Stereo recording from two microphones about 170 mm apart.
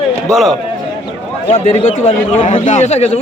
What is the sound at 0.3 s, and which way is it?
Speech, centre (ahead or behind).